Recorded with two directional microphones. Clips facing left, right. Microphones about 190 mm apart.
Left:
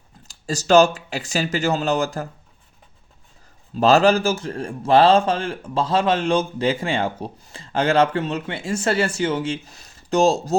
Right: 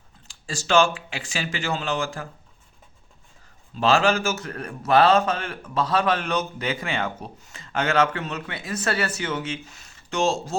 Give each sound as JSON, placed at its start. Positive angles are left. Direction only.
{"t": 0.3, "sound": "speech", "side_deg": 40}
{"t": 3.8, "sound": "a man's voice", "side_deg": 40}